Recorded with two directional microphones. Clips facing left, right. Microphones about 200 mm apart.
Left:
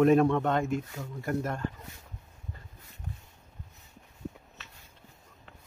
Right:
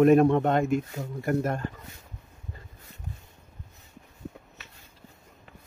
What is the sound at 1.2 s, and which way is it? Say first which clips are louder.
Speech: right 5 dB; 55° right (ahead or behind).